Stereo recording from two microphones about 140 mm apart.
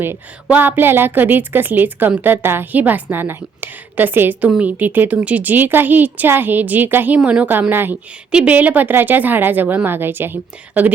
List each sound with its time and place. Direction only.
0.4 s a woman's voice: 10° right (ahead or behind)